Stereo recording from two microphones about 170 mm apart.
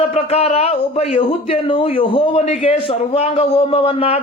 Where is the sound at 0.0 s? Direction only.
35° left (ahead or behind).